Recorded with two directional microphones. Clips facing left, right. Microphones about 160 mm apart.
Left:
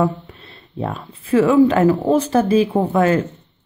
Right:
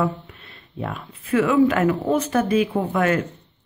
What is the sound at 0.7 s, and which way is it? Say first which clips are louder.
Speech: left 5 dB; 30° left (ahead or behind).